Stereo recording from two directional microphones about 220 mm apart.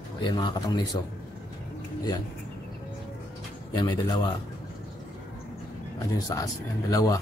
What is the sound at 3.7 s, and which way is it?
Speech, 20° left (ahead or behind).